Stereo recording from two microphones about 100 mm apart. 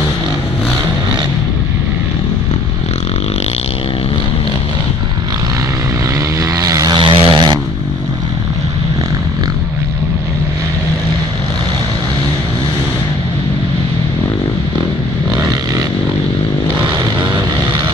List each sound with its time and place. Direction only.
6.5 s vehicle: 35° right (ahead or behind)
7.0 s vehicle: 60° right (ahead or behind)
16.8 s vehicle: 50° right (ahead or behind)